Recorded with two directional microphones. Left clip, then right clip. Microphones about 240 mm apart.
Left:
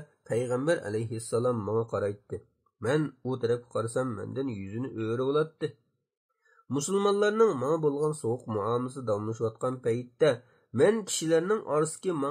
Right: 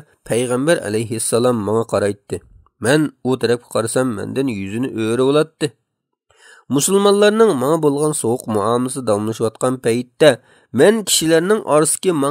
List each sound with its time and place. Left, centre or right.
0.2 s speech: right
6.7 s speech: right